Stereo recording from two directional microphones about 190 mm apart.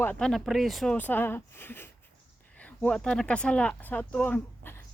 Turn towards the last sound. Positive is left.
turn(degrees=10)  # may be behind; listen again after turning